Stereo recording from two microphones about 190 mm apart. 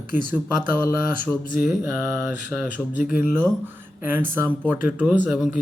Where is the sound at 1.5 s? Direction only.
45° left (ahead or behind).